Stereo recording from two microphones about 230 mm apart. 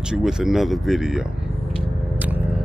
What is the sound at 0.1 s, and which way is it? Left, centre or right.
Speech, centre.